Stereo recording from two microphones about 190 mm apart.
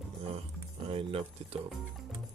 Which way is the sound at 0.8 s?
30° right (ahead or behind).